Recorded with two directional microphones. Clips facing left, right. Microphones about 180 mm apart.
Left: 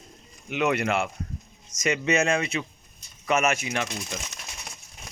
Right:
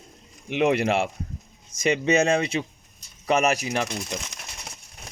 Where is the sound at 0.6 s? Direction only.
30° right (ahead or behind).